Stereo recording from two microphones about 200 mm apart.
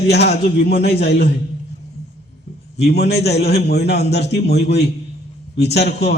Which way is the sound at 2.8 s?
55° left (ahead or behind).